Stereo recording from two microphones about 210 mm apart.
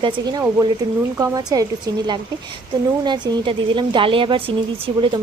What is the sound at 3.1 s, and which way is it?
Speech, 20° right (ahead or behind).